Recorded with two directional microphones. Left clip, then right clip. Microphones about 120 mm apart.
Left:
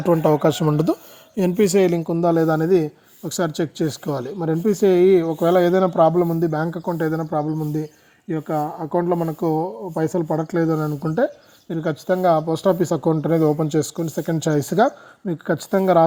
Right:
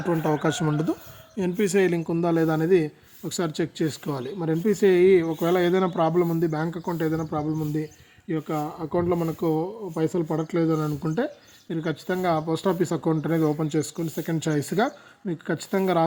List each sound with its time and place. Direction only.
0.0 s speech: 60° left (ahead or behind); by 11.2 s 35° left (ahead or behind)
11.7 s speech: 45° left (ahead or behind)